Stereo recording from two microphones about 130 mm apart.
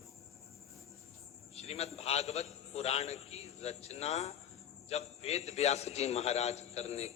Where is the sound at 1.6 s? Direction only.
55° left (ahead or behind).